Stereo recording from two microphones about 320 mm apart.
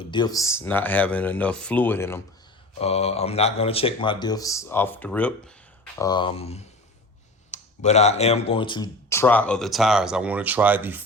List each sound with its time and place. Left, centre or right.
0.0 s speech: centre
2.7 s speech: centre